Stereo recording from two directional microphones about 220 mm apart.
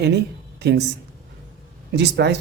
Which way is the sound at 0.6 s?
50° right (ahead or behind).